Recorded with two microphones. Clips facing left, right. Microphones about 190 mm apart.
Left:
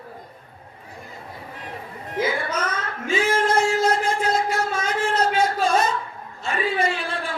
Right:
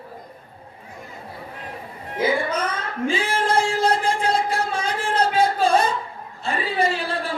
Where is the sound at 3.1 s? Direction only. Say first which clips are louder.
Left 3 dB; 30° right (ahead or behind).